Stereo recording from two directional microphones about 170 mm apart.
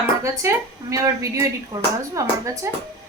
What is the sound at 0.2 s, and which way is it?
Speech, 20° right (ahead or behind).